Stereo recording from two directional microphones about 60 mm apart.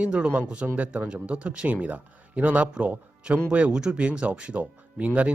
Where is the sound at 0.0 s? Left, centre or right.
Centre.